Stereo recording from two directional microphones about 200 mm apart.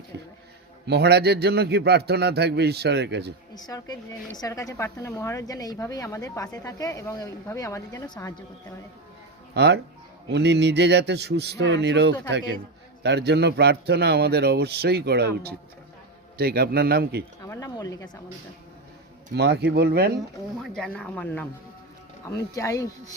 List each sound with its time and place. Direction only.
0.9 s speech: 55° right (ahead or behind)
3.5 s speech: 20° left (ahead or behind)
9.6 s a man's voice: 55° right (ahead or behind)
17.4 s speech: 20° left (ahead or behind)
19.3 s a man's voice: 60° right (ahead or behind)
20.6 s speech: 5° left (ahead or behind)